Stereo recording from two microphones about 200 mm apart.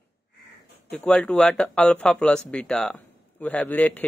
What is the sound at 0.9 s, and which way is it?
Speech, 5° left (ahead or behind).